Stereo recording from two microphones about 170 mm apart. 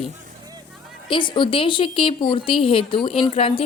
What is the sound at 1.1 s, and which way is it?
A woman's voice, 30° left (ahead or behind).